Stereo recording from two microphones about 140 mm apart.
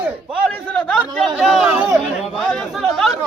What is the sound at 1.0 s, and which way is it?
Chatter, centre (ahead or behind).